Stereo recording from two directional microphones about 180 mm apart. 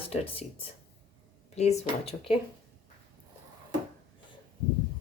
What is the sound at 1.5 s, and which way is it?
Speech, 40° left (ahead or behind).